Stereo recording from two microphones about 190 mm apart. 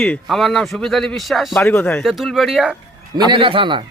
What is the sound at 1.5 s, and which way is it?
A man's voice, 10° left (ahead or behind).